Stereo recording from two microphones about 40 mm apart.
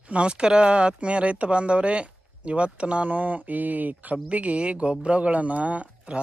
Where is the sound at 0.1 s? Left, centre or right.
Right.